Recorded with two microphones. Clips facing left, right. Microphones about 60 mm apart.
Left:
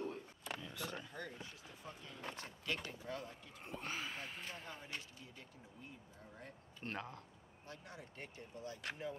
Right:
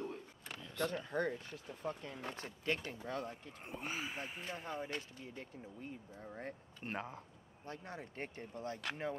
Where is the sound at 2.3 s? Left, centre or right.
Right.